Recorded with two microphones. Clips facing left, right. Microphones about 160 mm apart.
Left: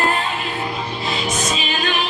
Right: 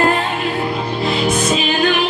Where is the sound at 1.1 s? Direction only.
60° right (ahead or behind).